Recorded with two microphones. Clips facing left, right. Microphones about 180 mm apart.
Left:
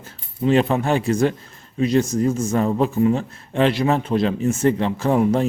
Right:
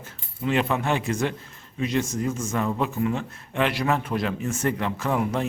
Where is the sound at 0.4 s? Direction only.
35° left (ahead or behind).